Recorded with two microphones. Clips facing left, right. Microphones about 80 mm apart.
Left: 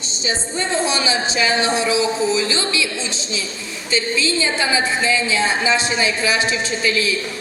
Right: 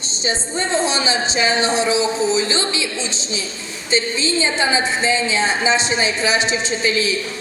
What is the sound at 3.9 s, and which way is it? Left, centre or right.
A woman's voice, right.